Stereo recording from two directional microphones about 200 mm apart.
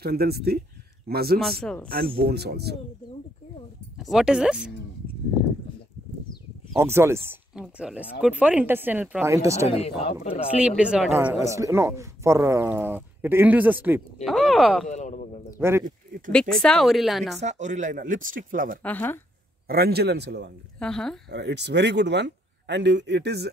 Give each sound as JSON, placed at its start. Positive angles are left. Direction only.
{"t": 0.0, "sound": "speech", "side_deg": -50}
{"t": 1.6, "sound": "speech", "side_deg": 5}
{"t": 1.9, "sound": "speech", "side_deg": -50}
{"t": 4.0, "sound": "speech", "side_deg": -5}
{"t": 6.7, "sound": "speech", "side_deg": -10}
{"t": 9.7, "sound": "speech", "side_deg": 30}
{"t": 10.8, "sound": "speech", "side_deg": -5}
{"t": 14.9, "sound": "a sound", "side_deg": 35}
{"t": 16.3, "sound": "speech", "side_deg": 5}
{"t": 17.4, "sound": "speech", "side_deg": -35}
{"t": 18.8, "sound": "speech", "side_deg": 10}
{"t": 19.7, "sound": "speech", "side_deg": -50}
{"t": 20.8, "sound": "speech", "side_deg": 5}
{"t": 21.3, "sound": "speech", "side_deg": -60}